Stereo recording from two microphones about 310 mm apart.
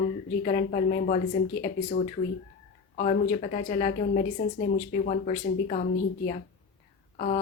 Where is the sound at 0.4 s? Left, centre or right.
Left.